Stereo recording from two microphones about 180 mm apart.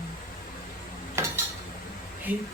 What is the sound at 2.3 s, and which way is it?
Speech, 10° right (ahead or behind).